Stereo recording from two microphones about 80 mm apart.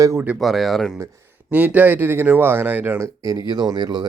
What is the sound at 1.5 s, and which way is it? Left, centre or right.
Speech, centre.